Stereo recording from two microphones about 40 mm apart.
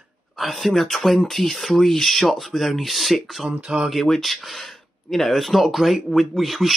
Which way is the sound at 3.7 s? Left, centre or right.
Right.